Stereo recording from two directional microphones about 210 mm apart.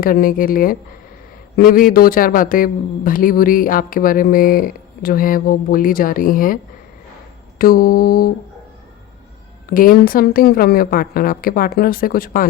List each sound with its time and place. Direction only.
0.0 s a man's voice: 40° left (ahead or behind)
7.6 s a man's voice: 45° left (ahead or behind)
9.6 s a man's voice: 40° left (ahead or behind)